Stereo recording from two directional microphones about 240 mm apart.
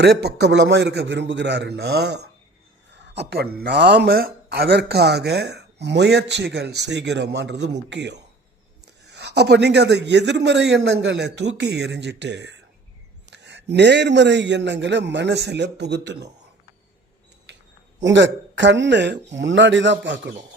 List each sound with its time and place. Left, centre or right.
0.0 s speech: right
18.0 s speech: right